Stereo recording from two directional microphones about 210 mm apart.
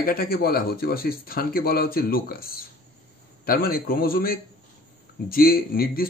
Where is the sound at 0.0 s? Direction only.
45° left (ahead or behind).